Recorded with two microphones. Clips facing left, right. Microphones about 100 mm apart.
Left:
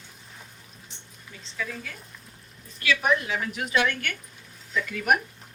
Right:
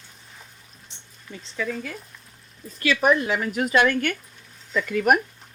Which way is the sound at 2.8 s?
45° right (ahead or behind).